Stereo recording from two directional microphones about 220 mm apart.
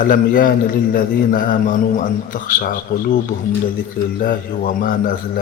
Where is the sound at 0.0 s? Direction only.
40° left (ahead or behind).